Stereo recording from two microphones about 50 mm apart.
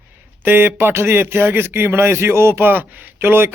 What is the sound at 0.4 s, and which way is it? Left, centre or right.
Speech, right.